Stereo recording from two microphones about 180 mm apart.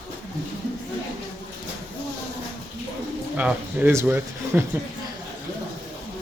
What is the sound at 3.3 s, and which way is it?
Speech, 10° right (ahead or behind).